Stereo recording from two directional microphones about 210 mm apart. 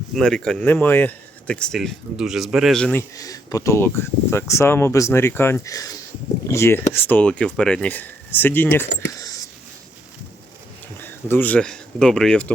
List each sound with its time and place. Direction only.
0.1 s speech: 5° left (ahead or behind)
3.2 s speech: 15° left (ahead or behind)
9.1 s a sound: 15° left (ahead or behind)
10.9 s speech: 10° left (ahead or behind)